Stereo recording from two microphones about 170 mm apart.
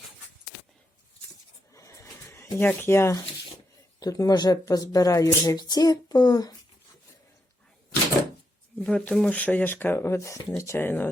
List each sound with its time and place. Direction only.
1.7 s a sound: 15° left (ahead or behind)
4.0 s speech: 20° left (ahead or behind)
8.8 s speech: 5° left (ahead or behind)